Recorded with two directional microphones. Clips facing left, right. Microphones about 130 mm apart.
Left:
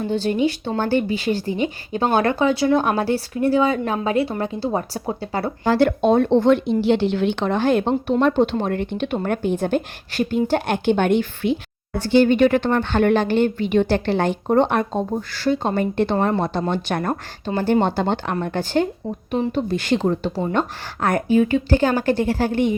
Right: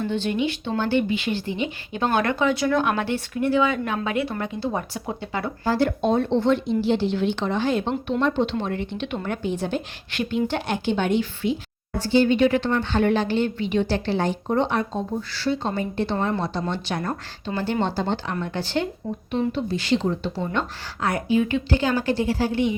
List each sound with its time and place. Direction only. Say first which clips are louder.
0.0 s speech: left 4 dB; 40° left (ahead or behind)
5.6 s speech: left 5 dB; 70° left (ahead or behind); by 22.7 s 50° left (ahead or behind)